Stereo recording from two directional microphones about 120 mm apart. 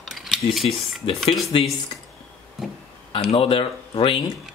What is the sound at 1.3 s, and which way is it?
Speech, 45° left (ahead or behind).